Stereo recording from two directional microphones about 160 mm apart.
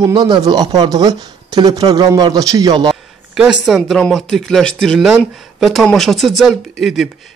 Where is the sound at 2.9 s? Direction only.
5° right (ahead or behind).